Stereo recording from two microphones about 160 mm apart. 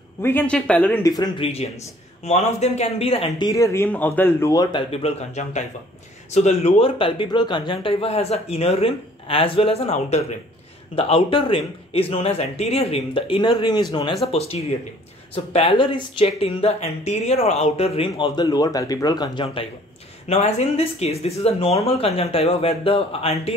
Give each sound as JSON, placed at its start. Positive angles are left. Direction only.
{"t": 0.2, "sound": "speech", "side_deg": 10}
{"t": 1.0, "sound": "speech", "side_deg": 25}
{"t": 3.4, "sound": "speech", "side_deg": 20}
{"t": 4.9, "sound": "speech", "side_deg": 40}
{"t": 14.2, "sound": "speech", "side_deg": 40}
{"t": 20.2, "sound": "speech", "side_deg": 45}